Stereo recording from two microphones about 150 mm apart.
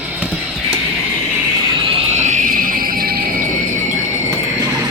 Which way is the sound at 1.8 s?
50° right (ahead or behind).